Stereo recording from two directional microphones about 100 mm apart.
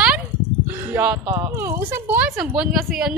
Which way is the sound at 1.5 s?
25° right (ahead or behind).